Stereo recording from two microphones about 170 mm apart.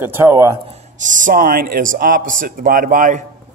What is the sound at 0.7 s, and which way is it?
A man's voice, 45° right (ahead or behind).